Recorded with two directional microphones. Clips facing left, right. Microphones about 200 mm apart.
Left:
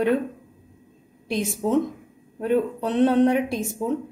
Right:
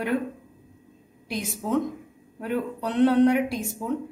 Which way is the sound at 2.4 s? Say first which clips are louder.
Left 6 dB; 25° left (ahead or behind).